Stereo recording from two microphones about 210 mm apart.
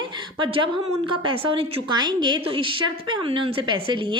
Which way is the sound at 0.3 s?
25° right (ahead or behind).